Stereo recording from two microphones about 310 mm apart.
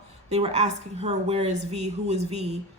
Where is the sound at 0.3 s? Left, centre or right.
Right.